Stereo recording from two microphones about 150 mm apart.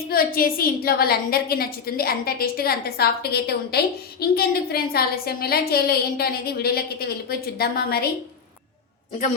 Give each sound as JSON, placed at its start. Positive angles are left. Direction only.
{"t": 0.1, "sound": "a woman's voice", "side_deg": 80}